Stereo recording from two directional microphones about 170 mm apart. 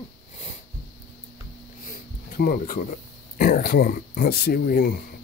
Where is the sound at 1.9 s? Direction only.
55° left (ahead or behind).